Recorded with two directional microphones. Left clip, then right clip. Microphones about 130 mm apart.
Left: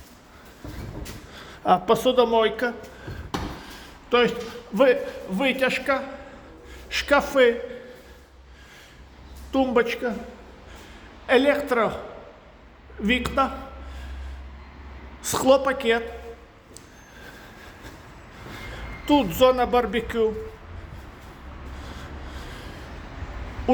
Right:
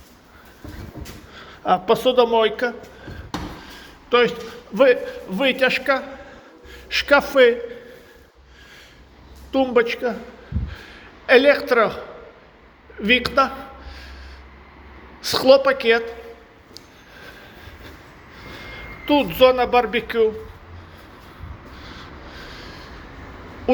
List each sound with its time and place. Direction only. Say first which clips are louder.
1.4 s speech: right 1 dB; 40° left (ahead or behind)
1.9 s a man's voice: right 6 dB; 20° left (ahead or behind)
3.7 s a sound: right 4 dB; 20° left (ahead or behind)
5.3 s speech: right 4 dB; 5° right (ahead or behind)
9.5 s a man's voice: right 3 dB; 20° left (ahead or behind)
11.3 s a man's voice: right 6 dB; 10° left (ahead or behind)
13.0 s a man's voice: right 6 dB; 10° left (ahead or behind)
15.3 s a man's voice: right 5 dB; 15° left (ahead or behind)
18.5 s a sound: right 2 dB; 30° left (ahead or behind)
19.8 s a man's voice: right 4 dB; 15° left (ahead or behind)
22.4 s vehicle: right 5 dB; 25° left (ahead or behind)